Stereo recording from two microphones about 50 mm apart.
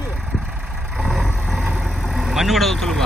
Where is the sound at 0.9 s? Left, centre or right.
Centre.